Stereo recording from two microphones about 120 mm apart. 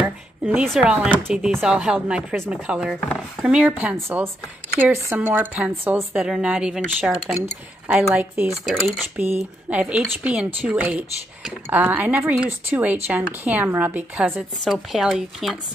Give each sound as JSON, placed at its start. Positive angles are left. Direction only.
{"t": 0.0, "sound": "a sound", "side_deg": -15}
{"t": 0.7, "sound": "speech", "side_deg": -10}
{"t": 8.6, "sound": "speech", "side_deg": -5}
{"t": 14.6, "sound": "speech", "side_deg": 0}